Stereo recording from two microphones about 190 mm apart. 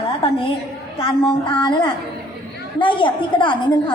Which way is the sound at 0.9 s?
30° left (ahead or behind).